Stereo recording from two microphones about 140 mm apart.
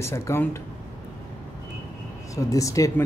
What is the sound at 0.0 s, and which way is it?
Speech, 20° left (ahead or behind).